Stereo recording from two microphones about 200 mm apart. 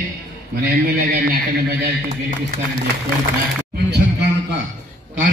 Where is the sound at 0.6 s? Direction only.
50° right (ahead or behind).